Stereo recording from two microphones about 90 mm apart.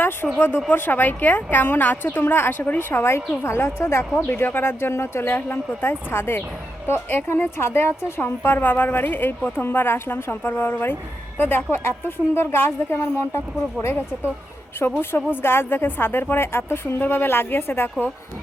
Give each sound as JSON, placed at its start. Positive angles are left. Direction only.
{"t": 0.3, "sound": "a woman's voice", "side_deg": 25}
{"t": 14.8, "sound": "a woman's voice", "side_deg": 25}